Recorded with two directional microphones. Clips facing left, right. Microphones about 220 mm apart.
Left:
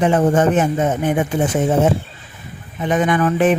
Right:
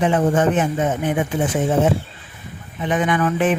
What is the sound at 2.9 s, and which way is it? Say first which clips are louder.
Speech: left 3 dB; 40° left (ahead or behind).